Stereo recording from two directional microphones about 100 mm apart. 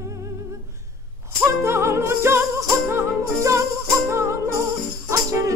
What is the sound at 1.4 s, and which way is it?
Music, 25° right (ahead or behind).